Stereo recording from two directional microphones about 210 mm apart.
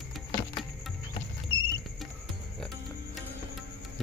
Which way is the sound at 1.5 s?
20° left (ahead or behind).